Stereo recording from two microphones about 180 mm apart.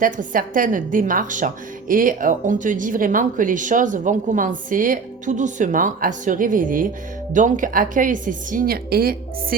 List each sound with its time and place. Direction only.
0.0 s speech: 50° right (ahead or behind)